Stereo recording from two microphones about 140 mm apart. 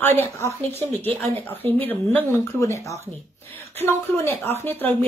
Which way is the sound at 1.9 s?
10° left (ahead or behind).